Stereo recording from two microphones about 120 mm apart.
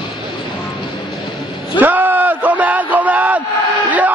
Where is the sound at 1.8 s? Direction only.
15° right (ahead or behind).